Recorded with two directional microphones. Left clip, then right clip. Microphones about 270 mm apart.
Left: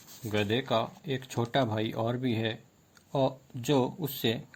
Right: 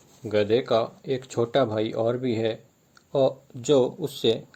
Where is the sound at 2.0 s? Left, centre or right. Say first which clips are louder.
Right 7 dB; left.